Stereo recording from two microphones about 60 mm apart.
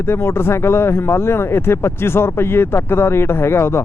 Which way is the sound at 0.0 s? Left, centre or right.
Left.